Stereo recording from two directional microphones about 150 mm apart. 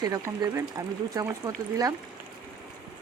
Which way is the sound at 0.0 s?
25° right (ahead or behind).